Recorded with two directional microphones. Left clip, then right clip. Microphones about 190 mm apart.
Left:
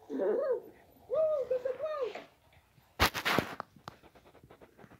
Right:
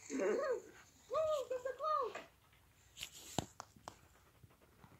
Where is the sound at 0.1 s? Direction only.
10° right (ahead or behind).